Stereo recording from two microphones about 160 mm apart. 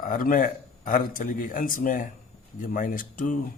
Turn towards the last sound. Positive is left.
turn(degrees=55)  # may be behind; listen again after turning